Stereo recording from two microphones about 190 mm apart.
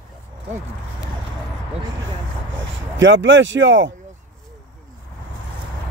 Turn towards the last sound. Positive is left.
turn(degrees=-75)  # may be behind; listen again after turning